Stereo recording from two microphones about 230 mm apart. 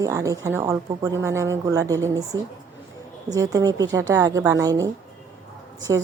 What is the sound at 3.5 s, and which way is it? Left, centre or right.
A woman's voice, centre.